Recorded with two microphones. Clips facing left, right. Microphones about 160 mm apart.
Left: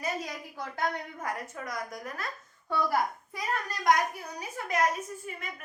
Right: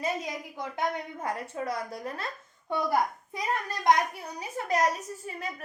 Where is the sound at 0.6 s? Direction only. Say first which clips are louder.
Right 1 dB; 20° right (ahead or behind).